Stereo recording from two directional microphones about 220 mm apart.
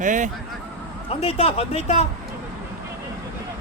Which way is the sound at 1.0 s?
25° left (ahead or behind).